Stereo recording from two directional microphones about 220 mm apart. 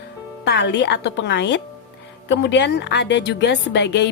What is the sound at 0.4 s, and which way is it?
Speech, 50° left (ahead or behind).